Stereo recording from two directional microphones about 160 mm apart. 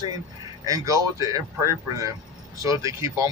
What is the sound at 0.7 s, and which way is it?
Speech, 20° right (ahead or behind).